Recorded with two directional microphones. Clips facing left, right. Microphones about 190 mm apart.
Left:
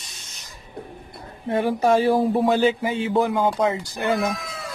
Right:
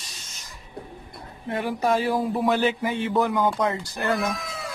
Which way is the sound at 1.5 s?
25° left (ahead or behind).